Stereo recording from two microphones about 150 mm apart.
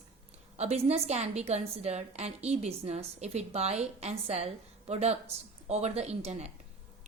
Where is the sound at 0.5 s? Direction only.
45° right (ahead or behind).